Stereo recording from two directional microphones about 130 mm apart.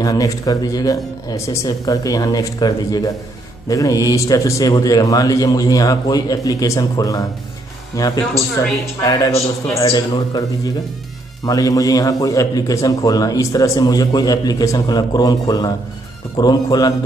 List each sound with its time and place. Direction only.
0.0 s a man's voice: 25° left (ahead or behind)